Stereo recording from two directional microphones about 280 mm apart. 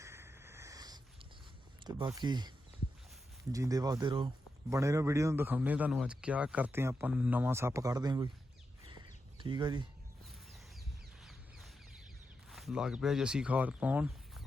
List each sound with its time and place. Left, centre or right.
0.0 s a sound: centre
1.8 s a man's voice: centre
3.5 s a man's voice: centre
9.4 s a man's voice: centre
11.2 s a sound: centre
12.5 s speech: centre